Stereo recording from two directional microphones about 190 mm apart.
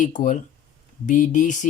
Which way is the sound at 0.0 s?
40° left (ahead or behind).